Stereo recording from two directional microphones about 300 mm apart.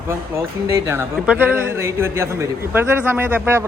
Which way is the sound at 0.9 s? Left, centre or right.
Centre.